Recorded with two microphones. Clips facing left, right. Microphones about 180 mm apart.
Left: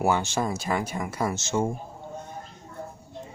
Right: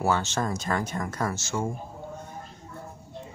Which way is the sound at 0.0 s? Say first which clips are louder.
Left 2 dB; 15° left (ahead or behind).